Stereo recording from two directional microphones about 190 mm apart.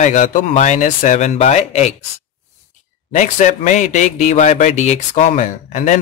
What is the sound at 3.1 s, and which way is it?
Speech, 40° left (ahead or behind).